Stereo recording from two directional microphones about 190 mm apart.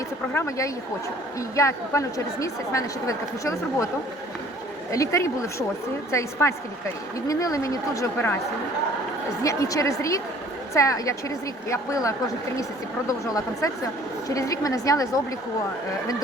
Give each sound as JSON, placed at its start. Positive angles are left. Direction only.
{"t": 0.3, "sound": "a woman's voice", "side_deg": 15}
{"t": 4.9, "sound": "a woman's voice", "side_deg": 15}
{"t": 9.4, "sound": "a woman's voice", "side_deg": 15}